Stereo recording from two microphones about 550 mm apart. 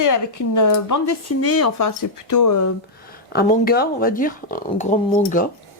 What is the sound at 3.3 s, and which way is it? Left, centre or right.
Speech, centre.